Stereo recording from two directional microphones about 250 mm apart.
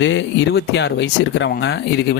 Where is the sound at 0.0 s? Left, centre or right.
Left.